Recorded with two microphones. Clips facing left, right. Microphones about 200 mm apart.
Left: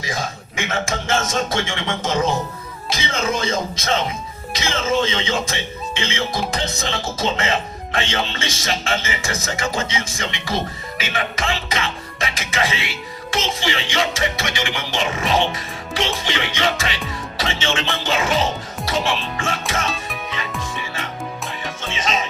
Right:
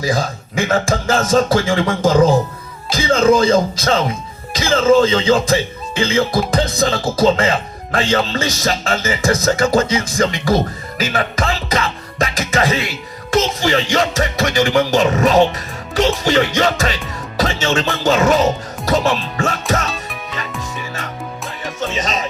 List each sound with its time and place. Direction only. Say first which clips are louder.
0.0 s speech: right 8 dB; 35° right (ahead or behind)
19.9 s music: right 1 dB; centre (ahead or behind)
21.8 s music: right 6 dB; 40° right (ahead or behind)